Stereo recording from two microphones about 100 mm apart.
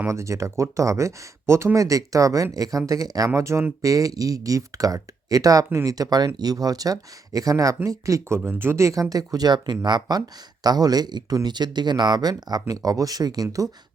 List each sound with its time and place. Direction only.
0.1 s speech: 30° right (ahead or behind)
8.4 s speech: 20° right (ahead or behind); by 13.7 s 35° right (ahead or behind)